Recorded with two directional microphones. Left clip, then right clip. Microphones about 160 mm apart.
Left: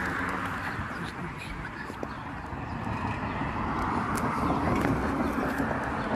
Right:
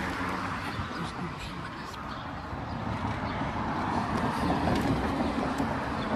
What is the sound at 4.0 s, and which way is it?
Vehicle, 10° left (ahead or behind).